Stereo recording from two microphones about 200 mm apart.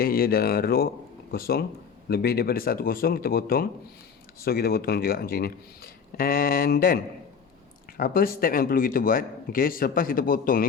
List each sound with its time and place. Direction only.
0.0 s speech: 50° left (ahead or behind)